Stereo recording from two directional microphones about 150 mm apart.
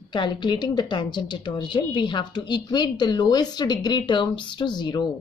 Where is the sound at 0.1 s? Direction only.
30° left (ahead or behind).